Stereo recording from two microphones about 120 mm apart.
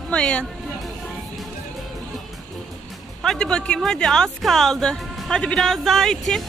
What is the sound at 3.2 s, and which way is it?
Speech, 5° left (ahead or behind).